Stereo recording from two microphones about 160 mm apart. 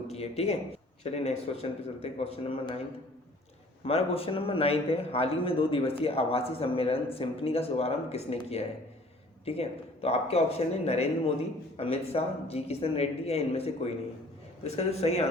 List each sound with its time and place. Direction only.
0.1 s a man's voice: 40° left (ahead or behind)
3.8 s a man's voice: 35° left (ahead or behind)